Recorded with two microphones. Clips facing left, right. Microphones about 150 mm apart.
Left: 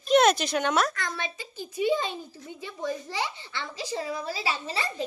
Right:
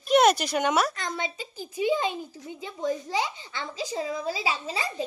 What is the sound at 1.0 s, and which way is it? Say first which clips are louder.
Speech: right 2 dB; 20° right (ahead or behind).